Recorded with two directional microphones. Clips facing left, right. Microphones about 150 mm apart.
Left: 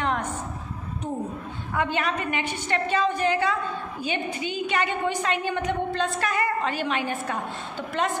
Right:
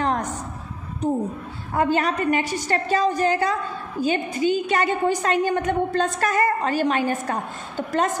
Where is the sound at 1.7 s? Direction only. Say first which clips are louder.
Right 5 dB; 40° right (ahead or behind).